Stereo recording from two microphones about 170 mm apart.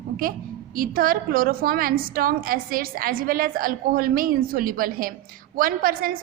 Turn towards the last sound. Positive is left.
turn(degrees=-55)  # may be behind; listen again after turning